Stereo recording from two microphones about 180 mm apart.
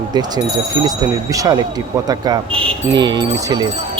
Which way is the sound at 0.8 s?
20° right (ahead or behind).